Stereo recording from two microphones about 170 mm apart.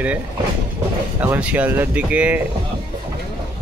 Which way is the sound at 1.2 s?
10° right (ahead or behind).